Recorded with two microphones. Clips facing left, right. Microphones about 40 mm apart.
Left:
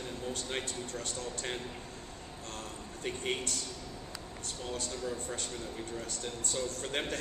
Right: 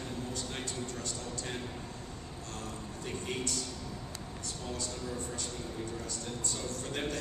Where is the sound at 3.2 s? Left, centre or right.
Left.